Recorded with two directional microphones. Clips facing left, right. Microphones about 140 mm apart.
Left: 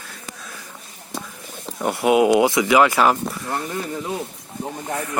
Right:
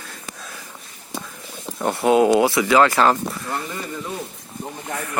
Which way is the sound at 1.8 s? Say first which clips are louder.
Even; 10° left (ahead or behind).